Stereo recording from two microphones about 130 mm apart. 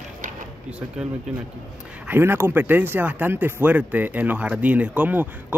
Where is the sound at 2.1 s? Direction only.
20° right (ahead or behind).